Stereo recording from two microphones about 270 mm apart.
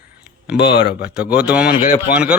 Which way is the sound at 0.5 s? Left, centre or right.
Left.